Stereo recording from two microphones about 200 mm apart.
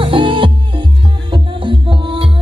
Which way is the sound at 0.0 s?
25° right (ahead or behind).